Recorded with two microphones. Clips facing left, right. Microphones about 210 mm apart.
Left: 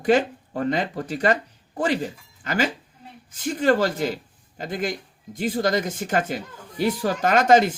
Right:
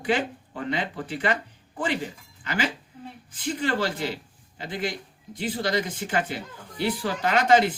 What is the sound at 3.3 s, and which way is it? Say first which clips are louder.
Speech: left 7 dB; 45° left (ahead or behind).